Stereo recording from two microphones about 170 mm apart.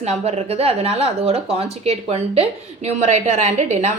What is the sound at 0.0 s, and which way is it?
Speech, 40° right (ahead or behind).